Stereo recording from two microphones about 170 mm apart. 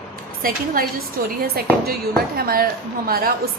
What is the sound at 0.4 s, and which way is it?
A woman's voice, 55° right (ahead or behind).